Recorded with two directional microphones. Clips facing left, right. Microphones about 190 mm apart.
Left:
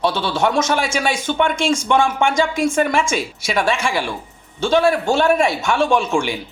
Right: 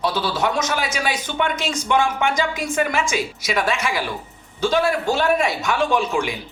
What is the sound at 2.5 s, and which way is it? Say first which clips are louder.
Speech: left 7 dB; 50° left (ahead or behind).